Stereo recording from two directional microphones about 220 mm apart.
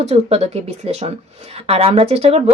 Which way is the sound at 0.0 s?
30° right (ahead or behind).